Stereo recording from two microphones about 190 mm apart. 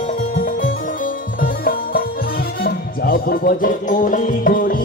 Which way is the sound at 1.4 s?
50° left (ahead or behind).